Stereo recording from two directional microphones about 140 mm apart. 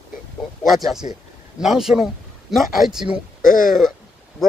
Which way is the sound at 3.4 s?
70° left (ahead or behind).